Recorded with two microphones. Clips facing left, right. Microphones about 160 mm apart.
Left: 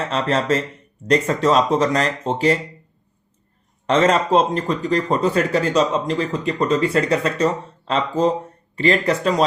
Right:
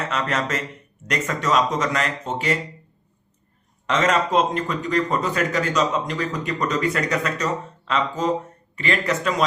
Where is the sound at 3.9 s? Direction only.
30° left (ahead or behind).